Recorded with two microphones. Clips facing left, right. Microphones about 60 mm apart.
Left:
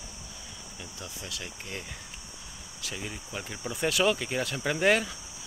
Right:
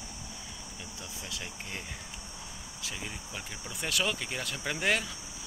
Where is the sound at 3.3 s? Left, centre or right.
Centre.